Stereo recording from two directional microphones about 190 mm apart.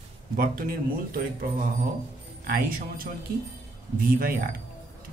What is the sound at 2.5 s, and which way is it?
Speech, 50° right (ahead or behind).